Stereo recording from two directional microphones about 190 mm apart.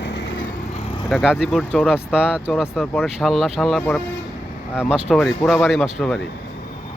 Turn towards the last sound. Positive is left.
turn(degrees=0)  # may be behind; listen again after turning